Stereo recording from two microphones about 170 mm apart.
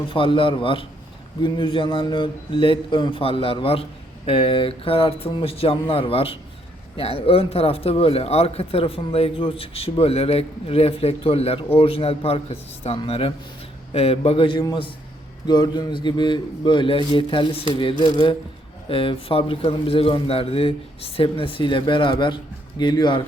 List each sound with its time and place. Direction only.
0.1 s speech: 30° left (ahead or behind)